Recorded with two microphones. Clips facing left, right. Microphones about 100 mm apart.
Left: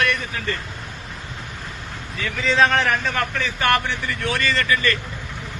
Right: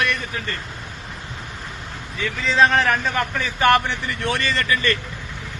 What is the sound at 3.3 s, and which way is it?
Speech, 15° right (ahead or behind).